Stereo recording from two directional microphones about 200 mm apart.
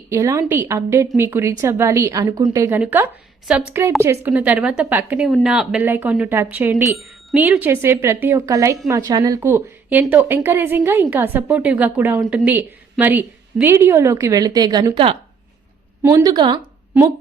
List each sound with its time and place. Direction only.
0.1 s a woman's voice: 15° right (ahead or behind)